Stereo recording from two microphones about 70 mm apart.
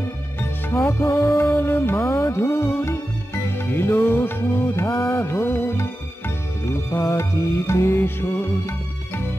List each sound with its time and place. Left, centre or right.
0.4 s music: left
1.0 s music: left